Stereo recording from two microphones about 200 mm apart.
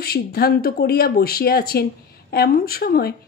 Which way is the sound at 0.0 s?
50° left (ahead or behind).